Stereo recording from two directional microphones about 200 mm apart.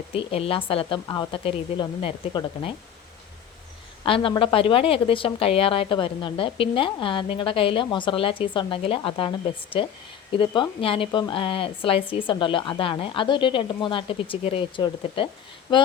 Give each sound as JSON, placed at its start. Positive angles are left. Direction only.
{"t": 0.1, "sound": "a woman's voice", "side_deg": 30}
{"t": 4.0, "sound": "a woman's voice", "side_deg": 25}